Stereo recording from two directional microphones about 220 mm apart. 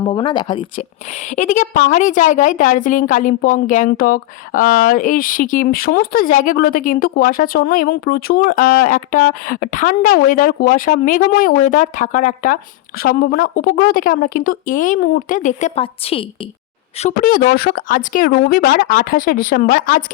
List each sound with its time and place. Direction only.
0.0 s speech: 20° left (ahead or behind)
1.4 s a woman's voice: 35° left (ahead or behind)
17.0 s a woman's voice: 35° left (ahead or behind)